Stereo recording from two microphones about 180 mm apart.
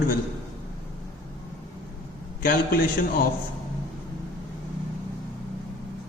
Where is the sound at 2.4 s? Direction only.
55° left (ahead or behind).